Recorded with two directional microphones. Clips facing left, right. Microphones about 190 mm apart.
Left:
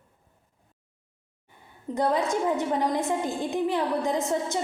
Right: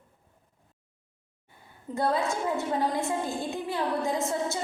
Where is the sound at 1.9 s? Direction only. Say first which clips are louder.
Left 3 dB; 20° left (ahead or behind).